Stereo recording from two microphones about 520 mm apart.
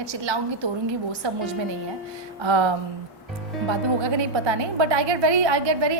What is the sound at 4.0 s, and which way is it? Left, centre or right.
A woman's voice, right.